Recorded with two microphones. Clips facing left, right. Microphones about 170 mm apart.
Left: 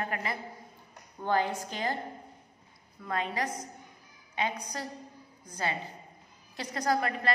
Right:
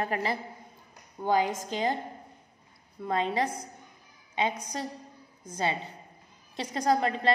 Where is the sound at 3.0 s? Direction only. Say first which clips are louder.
Right 5 dB; 25° right (ahead or behind).